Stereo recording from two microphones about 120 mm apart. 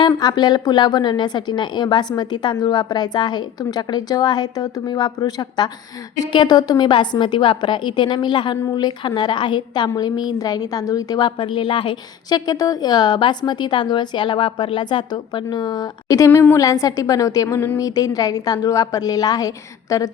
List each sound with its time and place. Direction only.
0.0 s a woman's voice: 35° left (ahead or behind)
11.3 s a woman's voice: 45° left (ahead or behind); by 20.1 s 30° left (ahead or behind)